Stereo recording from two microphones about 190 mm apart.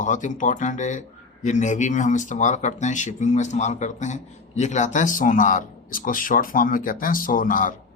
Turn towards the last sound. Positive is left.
turn(degrees=45)  # may be behind; listen again after turning